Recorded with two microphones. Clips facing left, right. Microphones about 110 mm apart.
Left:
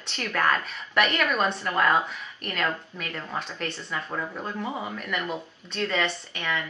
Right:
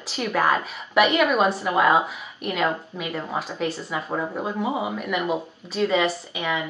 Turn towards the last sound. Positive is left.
turn(degrees=-5)  # may be behind; listen again after turning